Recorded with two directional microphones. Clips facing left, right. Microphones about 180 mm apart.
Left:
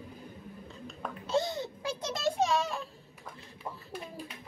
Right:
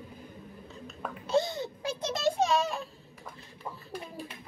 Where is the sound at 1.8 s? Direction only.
20° right (ahead or behind).